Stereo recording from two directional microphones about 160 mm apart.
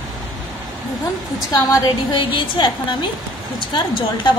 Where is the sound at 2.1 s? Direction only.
30° left (ahead or behind).